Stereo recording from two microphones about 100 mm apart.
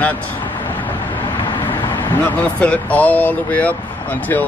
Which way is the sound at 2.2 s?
15° left (ahead or behind).